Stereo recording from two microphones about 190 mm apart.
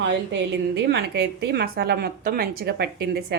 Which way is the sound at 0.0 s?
65° right (ahead or behind).